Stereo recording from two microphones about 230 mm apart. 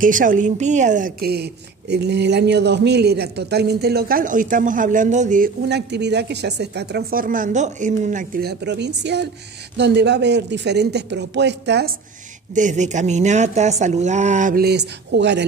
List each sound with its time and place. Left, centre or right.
0.0 s speech: right
12.5 s speech: right